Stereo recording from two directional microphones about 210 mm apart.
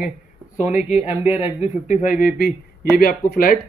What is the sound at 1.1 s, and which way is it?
Speech, 10° right (ahead or behind).